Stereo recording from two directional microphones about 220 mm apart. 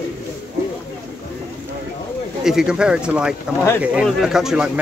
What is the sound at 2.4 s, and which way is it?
Speech, 5° right (ahead or behind).